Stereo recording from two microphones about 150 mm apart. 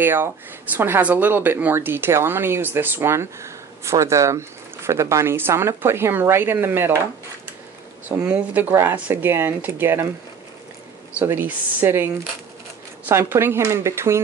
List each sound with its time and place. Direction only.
0.0 s speech: 15° right (ahead or behind)
8.2 s speech: 10° right (ahead or behind)
11.1 s speech: 10° right (ahead or behind)